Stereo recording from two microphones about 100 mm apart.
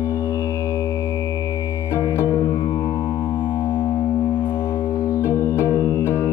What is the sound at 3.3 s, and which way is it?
Music, 50° left (ahead or behind).